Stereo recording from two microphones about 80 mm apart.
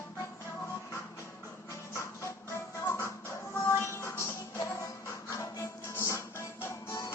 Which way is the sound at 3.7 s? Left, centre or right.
Left.